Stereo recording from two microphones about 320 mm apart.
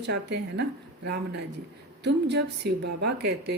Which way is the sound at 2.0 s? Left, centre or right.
Right.